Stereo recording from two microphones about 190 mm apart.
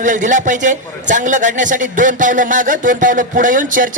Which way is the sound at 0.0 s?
40° right (ahead or behind).